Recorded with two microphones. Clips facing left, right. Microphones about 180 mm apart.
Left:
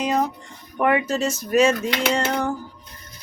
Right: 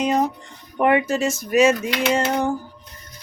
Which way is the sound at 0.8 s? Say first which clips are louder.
Right 2 dB; 25° right (ahead or behind).